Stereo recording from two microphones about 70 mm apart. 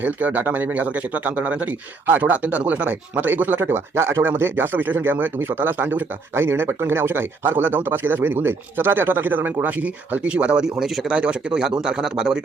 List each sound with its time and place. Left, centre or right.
0.0 s speech: right; by 12.4 s centre